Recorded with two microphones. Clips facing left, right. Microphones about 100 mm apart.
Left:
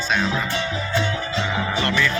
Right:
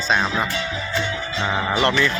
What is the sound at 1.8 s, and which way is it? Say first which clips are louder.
Speech: right 3 dB; 25° right (ahead or behind).